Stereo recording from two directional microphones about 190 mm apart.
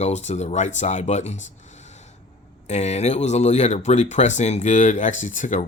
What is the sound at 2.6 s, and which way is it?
Speech, 35° left (ahead or behind).